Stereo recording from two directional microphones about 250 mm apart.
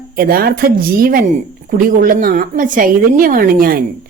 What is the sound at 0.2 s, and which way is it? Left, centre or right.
Speech, right.